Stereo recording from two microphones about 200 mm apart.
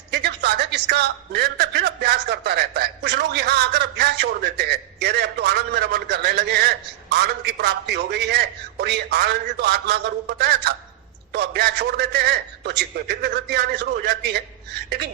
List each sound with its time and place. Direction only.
0.1 s a man's voice: 55° right (ahead or behind)